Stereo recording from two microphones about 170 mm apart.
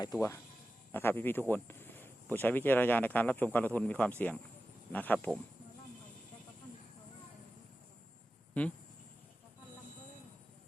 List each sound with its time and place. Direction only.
0.0 s speech: 20° left (ahead or behind)
8.6 s speech: 10° left (ahead or behind)